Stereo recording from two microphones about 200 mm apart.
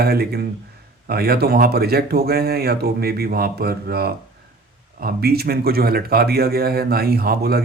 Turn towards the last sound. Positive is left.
turn(degrees=-50)  # may be behind; listen again after turning